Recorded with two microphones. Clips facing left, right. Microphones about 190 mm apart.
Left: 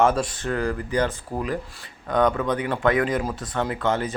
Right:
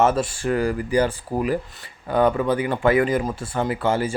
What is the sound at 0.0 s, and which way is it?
Speech, 5° right (ahead or behind).